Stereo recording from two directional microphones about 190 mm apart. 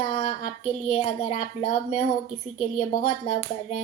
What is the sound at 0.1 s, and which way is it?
A woman's voice, 35° left (ahead or behind).